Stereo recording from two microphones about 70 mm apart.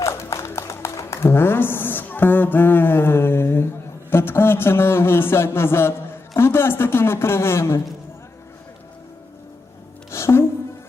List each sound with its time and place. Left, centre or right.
0.0 s music: left
4.1 s speech: left
10.1 s music: left